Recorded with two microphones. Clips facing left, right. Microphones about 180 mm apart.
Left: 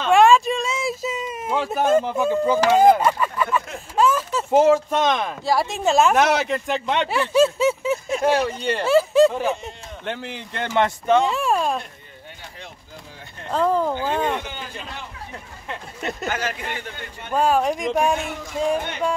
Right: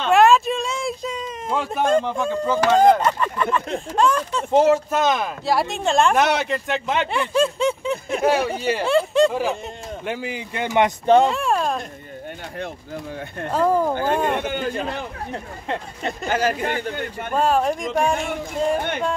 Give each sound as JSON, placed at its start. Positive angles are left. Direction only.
{"t": 0.0, "sound": "a sound", "side_deg": 0}
{"t": 3.9, "sound": "speech", "side_deg": 5}
{"t": 11.2, "sound": "a sound", "side_deg": 0}
{"t": 13.5, "sound": "speech", "side_deg": -10}
{"t": 14.3, "sound": "speech", "side_deg": -55}
{"t": 16.3, "sound": "speech", "side_deg": -35}
{"t": 17.3, "sound": "speech", "side_deg": 0}